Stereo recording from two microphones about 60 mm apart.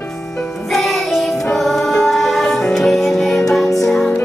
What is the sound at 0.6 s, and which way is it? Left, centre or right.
Music, centre.